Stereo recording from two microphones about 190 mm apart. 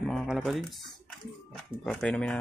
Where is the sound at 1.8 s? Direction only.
5° left (ahead or behind).